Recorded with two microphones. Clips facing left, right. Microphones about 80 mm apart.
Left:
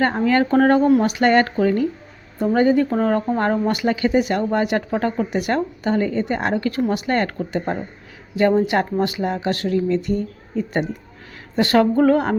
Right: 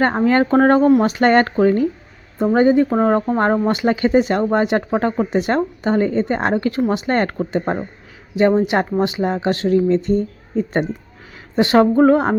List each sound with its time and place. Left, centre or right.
0.0 s speech: right
8.4 s speech: right